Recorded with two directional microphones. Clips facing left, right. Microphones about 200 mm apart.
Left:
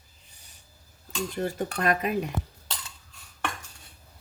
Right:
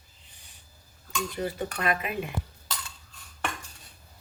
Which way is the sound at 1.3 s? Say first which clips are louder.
Left 3 dB; 45° left (ahead or behind).